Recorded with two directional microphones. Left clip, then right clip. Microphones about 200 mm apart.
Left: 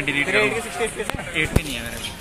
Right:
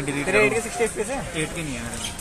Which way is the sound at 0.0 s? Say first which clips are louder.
Left 6 dB; 60° right (ahead or behind).